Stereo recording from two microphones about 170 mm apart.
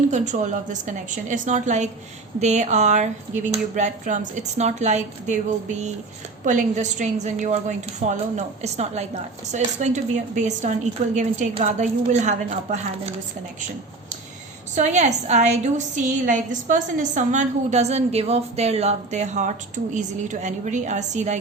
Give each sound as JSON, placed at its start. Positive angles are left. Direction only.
{"t": 0.1, "sound": "a woman's voice", "side_deg": -45}
{"t": 14.8, "sound": "a woman's voice", "side_deg": -45}